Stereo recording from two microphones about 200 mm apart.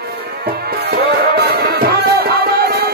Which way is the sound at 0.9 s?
50° right (ahead or behind).